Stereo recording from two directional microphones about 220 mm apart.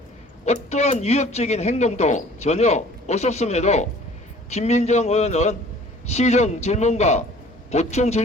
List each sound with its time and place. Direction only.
0.4 s a man's voice: 30° left (ahead or behind)